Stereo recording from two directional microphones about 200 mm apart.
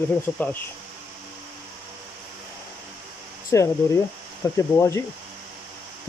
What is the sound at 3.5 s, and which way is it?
Speech, 15° left (ahead or behind).